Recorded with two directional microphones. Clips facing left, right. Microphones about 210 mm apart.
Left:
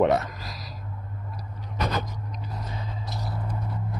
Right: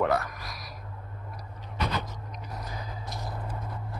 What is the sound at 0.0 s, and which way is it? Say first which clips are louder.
Speech: left 5 dB; 20° left (ahead or behind).